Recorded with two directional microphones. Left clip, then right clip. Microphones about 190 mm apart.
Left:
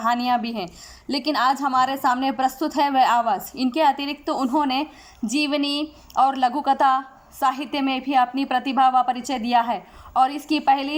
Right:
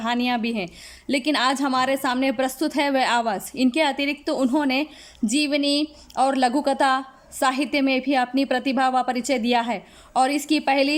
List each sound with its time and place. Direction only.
0.0 s speech: 20° right (ahead or behind)